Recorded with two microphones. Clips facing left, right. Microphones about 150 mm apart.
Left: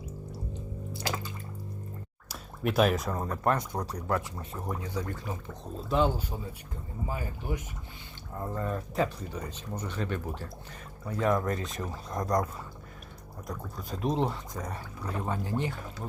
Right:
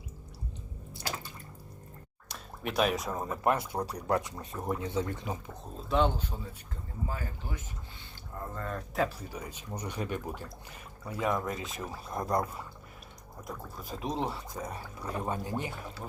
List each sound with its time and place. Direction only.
2.3 s speech: centre (ahead or behind)
4.6 s speech: 25° right (ahead or behind)
5.9 s speech: 5° left (ahead or behind)
7.1 s speech: 15° left (ahead or behind)
9.0 s speech: 5° right (ahead or behind)
13.5 s speech: 5° right (ahead or behind)